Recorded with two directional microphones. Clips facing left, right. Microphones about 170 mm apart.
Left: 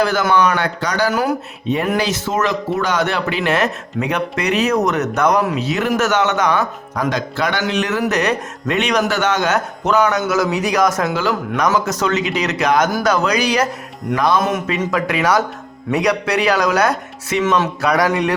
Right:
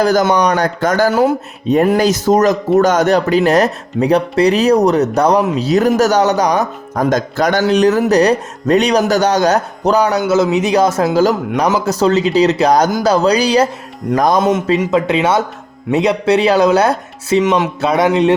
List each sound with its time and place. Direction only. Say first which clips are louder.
0.0 s a man's voice: right 3 dB; 40° right (ahead or behind)
1.1 s speech: right 6 dB; 25° right (ahead or behind)
1.6 s a man's voice: right 7 dB; 40° right (ahead or behind)
14.1 s speech: right 4 dB; 45° right (ahead or behind)
14.4 s speech: right 6 dB; 25° right (ahead or behind)
17.4 s speech: right 3 dB; 15° right (ahead or behind)